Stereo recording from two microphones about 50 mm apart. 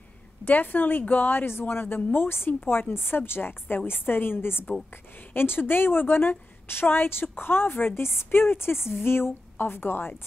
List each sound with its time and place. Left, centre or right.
0.5 s a woman's voice: left